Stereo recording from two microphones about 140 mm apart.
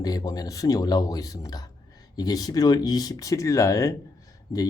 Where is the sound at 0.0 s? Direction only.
25° left (ahead or behind).